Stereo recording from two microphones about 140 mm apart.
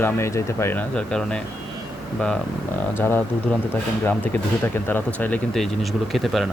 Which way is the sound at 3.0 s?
15° left (ahead or behind).